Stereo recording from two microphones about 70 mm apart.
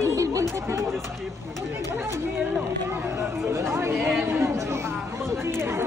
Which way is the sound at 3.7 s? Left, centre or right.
Right.